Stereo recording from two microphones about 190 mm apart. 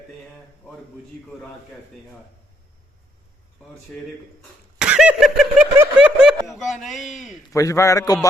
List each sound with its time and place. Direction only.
4.8 s a sound: 5° right (ahead or behind)
5.7 s snicker: 10° right (ahead or behind)
7.5 s a man's voice: 15° left (ahead or behind)